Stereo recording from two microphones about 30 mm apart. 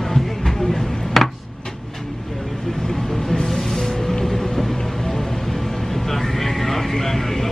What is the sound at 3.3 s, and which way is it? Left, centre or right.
Music, centre.